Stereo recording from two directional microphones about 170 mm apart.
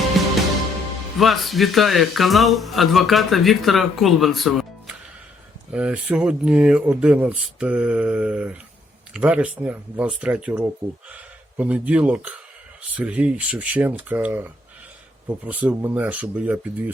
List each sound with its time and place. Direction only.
1.2 s speech: centre (ahead or behind)